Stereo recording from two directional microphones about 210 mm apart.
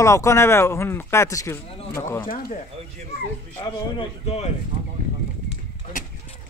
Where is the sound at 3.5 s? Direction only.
30° left (ahead or behind).